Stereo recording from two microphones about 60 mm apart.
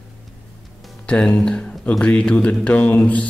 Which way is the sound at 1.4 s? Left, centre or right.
Centre.